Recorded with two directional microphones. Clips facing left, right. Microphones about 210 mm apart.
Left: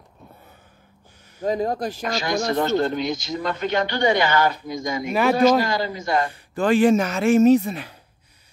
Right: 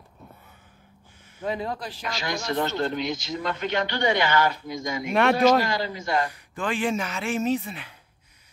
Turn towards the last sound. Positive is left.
turn(degrees=40)  # may be behind; listen again after turning